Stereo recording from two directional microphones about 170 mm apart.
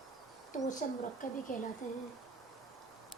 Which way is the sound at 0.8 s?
50° left (ahead or behind).